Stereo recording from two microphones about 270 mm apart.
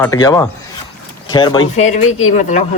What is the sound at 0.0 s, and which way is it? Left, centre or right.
Speech, centre.